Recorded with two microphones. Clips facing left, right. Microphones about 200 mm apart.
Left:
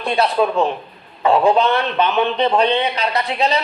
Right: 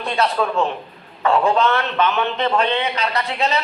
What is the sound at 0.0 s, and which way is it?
A man's voice, 15° left (ahead or behind).